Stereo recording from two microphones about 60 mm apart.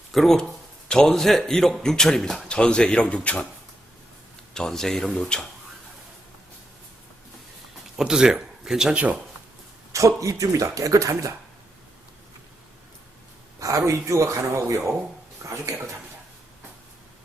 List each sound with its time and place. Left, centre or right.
0.1 s a man's voice: centre
4.5 s a man's voice: centre
7.9 s speech: centre
9.9 s speech: right
13.6 s speech: right